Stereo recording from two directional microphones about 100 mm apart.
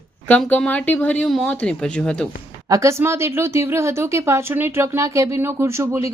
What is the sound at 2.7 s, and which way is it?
Speech, 30° right (ahead or behind).